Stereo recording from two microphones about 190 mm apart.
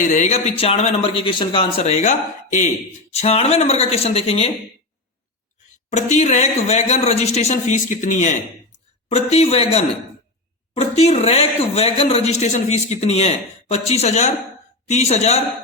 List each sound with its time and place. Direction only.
0.0 s a man's voice: 40° left (ahead or behind)
5.9 s a man's voice: 40° left (ahead or behind)